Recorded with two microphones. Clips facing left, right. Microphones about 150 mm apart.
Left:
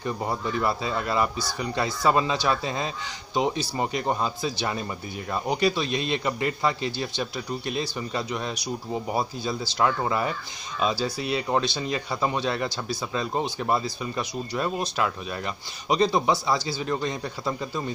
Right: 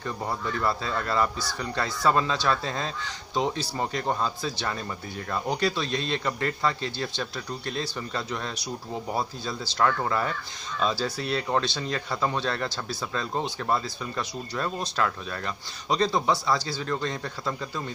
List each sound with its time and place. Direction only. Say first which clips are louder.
0.0 s speech: left 3 dB; 15° left (ahead or behind)
9.8 s speech: even; 15° left (ahead or behind)